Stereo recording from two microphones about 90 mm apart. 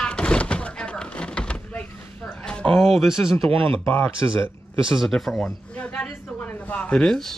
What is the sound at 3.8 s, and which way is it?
Speech, 20° left (ahead or behind).